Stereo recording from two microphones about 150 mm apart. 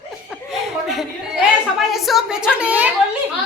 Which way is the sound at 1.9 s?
Centre (ahead or behind).